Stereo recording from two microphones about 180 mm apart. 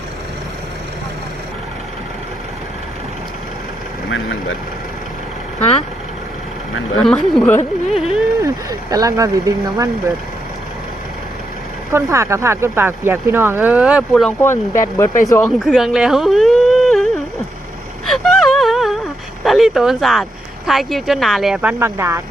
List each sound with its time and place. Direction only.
7.0 s speech: centre (ahead or behind)
8.4 s speech: 20° right (ahead or behind)
11.9 s speech: 15° right (ahead or behind); by 14.3 s centre (ahead or behind)
14.4 s speech: 15° left (ahead or behind)
18.0 s wail: centre (ahead or behind)
19.5 s speech: centre (ahead or behind)